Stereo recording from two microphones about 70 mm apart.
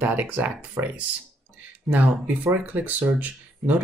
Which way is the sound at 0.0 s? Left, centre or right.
Right.